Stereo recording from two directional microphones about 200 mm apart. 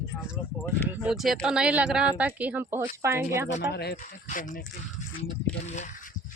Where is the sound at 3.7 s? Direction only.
55° left (ahead or behind).